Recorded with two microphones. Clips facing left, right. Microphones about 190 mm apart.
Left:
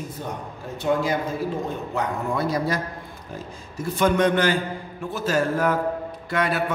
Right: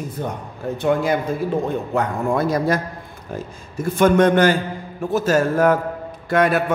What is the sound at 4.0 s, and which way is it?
A man's voice, 45° right (ahead or behind).